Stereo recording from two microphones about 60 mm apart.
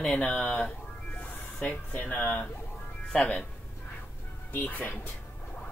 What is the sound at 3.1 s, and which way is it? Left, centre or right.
Speech, centre.